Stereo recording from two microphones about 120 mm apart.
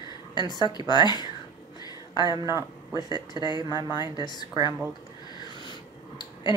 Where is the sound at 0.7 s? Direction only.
35° left (ahead or behind).